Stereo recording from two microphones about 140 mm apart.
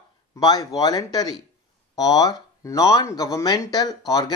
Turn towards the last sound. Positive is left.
turn(degrees=25)  # may be behind; listen again after turning